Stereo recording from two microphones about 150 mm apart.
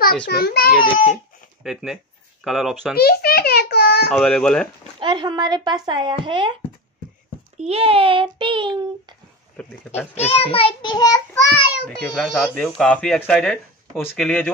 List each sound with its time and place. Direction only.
0.0 s a child's voice: 90° left
1.6 s speech: centre (ahead or behind)
3.0 s a child's voice: 90° left
4.1 s speech: 5° left (ahead or behind)
5.0 s a child's voice: 30° right (ahead or behind)
7.5 s a child's voice: 45° right (ahead or behind)
10.1 s child singing: 40° left (ahead or behind); by 11.5 s 25° left (ahead or behind)
12.2 s speech: 5° left (ahead or behind)